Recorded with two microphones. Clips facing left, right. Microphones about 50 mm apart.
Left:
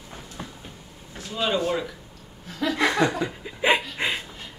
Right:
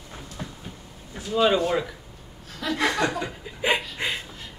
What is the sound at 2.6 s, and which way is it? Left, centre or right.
Chuckle, centre.